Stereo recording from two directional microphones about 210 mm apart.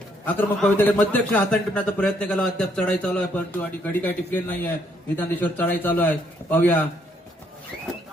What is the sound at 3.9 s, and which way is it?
A man's voice, 10° left (ahead or behind).